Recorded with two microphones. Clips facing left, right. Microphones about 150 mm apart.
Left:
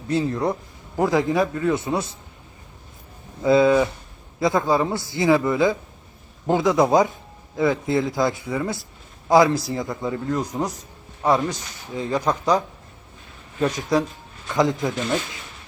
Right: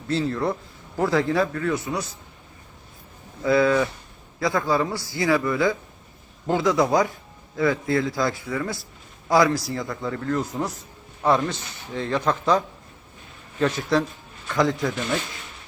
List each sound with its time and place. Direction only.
0.1 s speech: 15° left (ahead or behind)
3.4 s speech: 20° left (ahead or behind)